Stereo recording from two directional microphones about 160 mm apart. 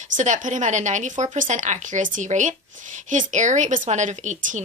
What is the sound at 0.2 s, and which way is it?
Speech, 50° right (ahead or behind).